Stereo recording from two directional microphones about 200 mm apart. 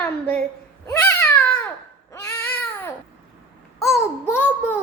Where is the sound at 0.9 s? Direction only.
10° left (ahead or behind).